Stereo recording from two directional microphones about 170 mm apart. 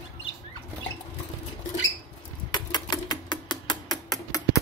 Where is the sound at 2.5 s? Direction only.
25° left (ahead or behind).